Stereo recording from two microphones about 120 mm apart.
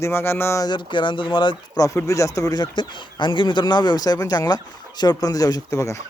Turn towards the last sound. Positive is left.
turn(degrees=25)  # may be behind; listen again after turning